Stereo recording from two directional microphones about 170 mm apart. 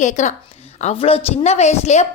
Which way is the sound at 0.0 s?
45° left (ahead or behind).